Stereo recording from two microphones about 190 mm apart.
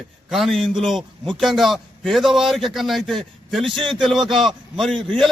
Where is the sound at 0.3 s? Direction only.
Centre (ahead or behind).